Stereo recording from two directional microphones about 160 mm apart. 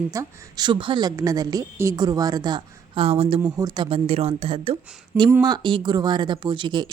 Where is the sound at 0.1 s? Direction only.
20° right (ahead or behind).